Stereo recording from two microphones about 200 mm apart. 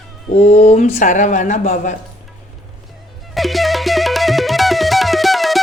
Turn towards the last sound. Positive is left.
turn(degrees=0)  # may be behind; listen again after turning